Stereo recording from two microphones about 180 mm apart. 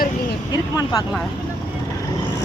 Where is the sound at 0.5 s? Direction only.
20° left (ahead or behind).